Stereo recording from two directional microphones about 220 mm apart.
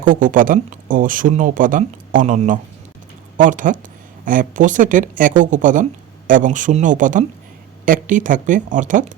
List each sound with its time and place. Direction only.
0.0 s speech: 35° right (ahead or behind)